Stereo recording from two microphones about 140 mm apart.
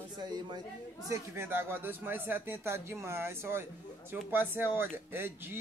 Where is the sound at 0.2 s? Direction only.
30° right (ahead or behind).